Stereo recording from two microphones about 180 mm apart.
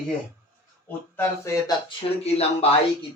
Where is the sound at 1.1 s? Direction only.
15° left (ahead or behind).